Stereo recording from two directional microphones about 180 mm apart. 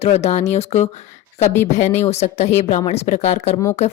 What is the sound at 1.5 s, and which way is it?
Speech, 15° left (ahead or behind).